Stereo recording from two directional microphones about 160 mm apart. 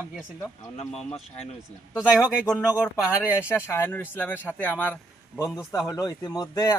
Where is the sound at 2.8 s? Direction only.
10° left (ahead or behind).